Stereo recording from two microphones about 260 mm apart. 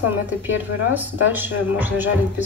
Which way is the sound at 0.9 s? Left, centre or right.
Centre.